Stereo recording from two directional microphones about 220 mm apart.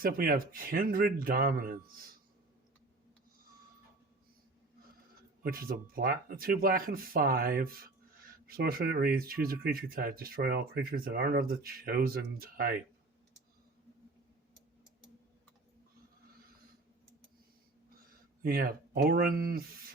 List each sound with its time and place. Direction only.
0.0 s speech: 40° right (ahead or behind)
5.4 s speech: 40° right (ahead or behind)
18.0 s speech: 40° right (ahead or behind)